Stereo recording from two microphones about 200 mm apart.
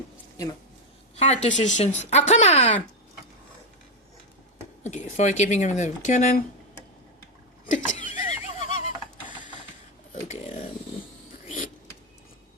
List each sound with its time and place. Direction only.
1.1 s speech: 35° left (ahead or behind)
4.8 s speech: 35° left (ahead or behind)
7.7 s laughter: 40° left (ahead or behind)
10.2 s a sound: 35° left (ahead or behind)